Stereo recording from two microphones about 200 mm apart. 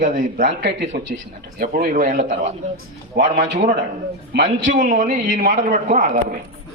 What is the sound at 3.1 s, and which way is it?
Speech, 60° right (ahead or behind).